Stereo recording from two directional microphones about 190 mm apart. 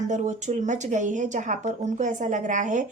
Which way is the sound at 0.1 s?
40° right (ahead or behind).